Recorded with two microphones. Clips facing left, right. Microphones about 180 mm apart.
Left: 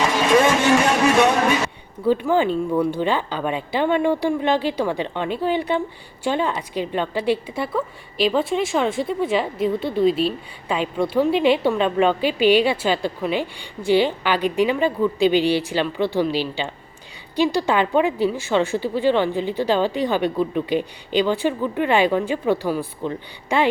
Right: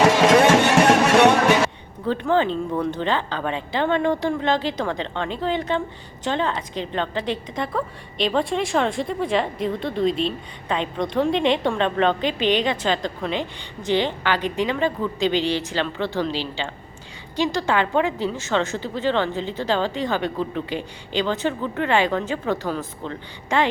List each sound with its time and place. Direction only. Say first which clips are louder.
0.6 s music: right 1 dB; 70° right (ahead or behind)
2.0 s a woman's voice: left 2 dB; 10° left (ahead or behind)